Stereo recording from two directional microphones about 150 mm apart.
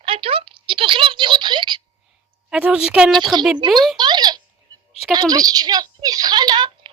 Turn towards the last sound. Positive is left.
turn(degrees=-30)  # may be behind; listen again after turning